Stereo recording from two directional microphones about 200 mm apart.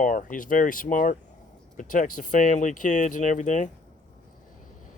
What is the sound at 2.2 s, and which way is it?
Speech, 40° left (ahead or behind).